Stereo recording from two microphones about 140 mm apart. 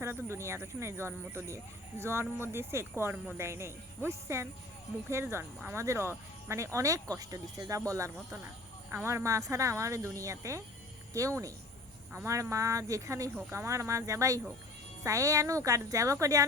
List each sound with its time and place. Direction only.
0.0 s speech: 20° right (ahead or behind)